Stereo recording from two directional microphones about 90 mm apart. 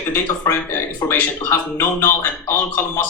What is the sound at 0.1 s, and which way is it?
Speech, 25° left (ahead or behind).